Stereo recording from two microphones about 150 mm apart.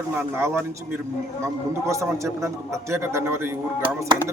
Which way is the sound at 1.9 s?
20° right (ahead or behind).